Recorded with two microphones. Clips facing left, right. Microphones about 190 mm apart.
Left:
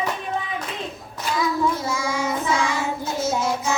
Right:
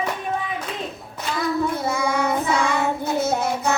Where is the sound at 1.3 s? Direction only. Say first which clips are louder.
Even; 60° right (ahead or behind).